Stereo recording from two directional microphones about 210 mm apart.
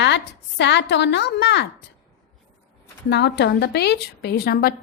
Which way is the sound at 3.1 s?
55° left (ahead or behind).